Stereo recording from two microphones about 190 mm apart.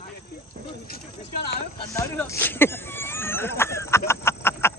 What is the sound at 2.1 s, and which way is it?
Cough, 10° left (ahead or behind).